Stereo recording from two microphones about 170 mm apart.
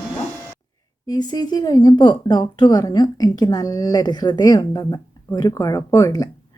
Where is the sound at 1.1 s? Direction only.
25° left (ahead or behind).